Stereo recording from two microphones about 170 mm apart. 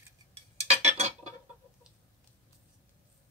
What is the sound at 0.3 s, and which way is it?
Cutlery, 40° right (ahead or behind).